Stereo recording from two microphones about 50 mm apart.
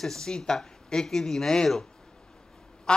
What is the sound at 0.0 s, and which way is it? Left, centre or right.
A man's voice, centre.